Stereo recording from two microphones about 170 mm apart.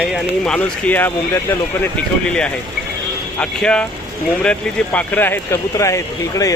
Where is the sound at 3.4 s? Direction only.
5° left (ahead or behind).